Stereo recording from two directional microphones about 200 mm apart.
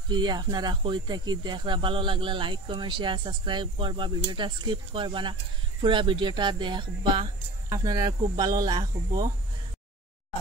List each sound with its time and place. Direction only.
0.1 s speech: 20° right (ahead or behind)